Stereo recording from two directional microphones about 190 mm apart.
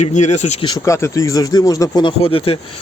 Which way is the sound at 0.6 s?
20° left (ahead or behind).